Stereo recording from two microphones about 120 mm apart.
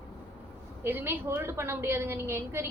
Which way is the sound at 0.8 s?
20° right (ahead or behind).